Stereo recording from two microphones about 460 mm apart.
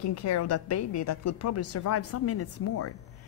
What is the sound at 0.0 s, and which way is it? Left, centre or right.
A woman's voice, left.